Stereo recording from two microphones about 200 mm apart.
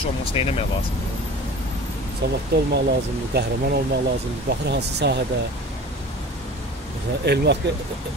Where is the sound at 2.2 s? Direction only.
60° right (ahead or behind).